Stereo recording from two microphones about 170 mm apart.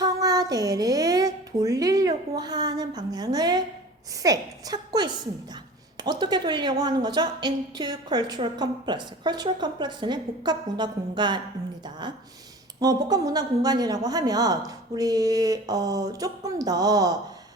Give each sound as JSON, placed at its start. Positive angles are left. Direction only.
{"t": 0.0, "sound": "a woman's voice", "side_deg": -20}